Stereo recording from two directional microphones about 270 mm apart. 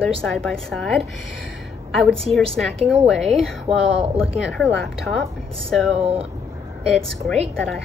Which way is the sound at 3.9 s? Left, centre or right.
Right.